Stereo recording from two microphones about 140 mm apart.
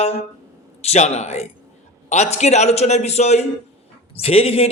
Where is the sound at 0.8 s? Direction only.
50° left (ahead or behind).